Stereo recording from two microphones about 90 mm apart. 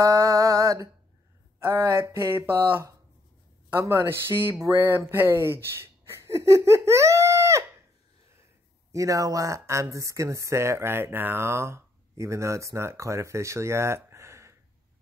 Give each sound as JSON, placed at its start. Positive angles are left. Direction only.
{"t": 0.0, "sound": "mantra", "side_deg": -35}
{"t": 1.6, "sound": "speech", "side_deg": -35}
{"t": 3.9, "sound": "speech", "side_deg": -25}
{"t": 8.9, "sound": "speech", "side_deg": -35}